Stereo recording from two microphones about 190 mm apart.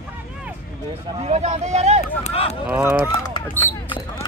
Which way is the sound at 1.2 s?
35° right (ahead or behind).